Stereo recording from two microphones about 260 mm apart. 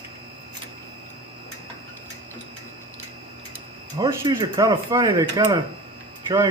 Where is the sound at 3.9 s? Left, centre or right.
Centre.